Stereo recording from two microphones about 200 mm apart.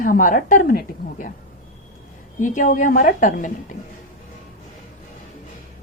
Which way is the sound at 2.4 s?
40° left (ahead or behind).